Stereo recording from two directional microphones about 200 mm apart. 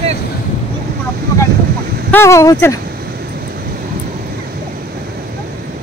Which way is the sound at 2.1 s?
15° left (ahead or behind).